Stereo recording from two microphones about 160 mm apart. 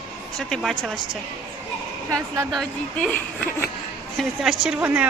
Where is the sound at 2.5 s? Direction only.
Centre (ahead or behind).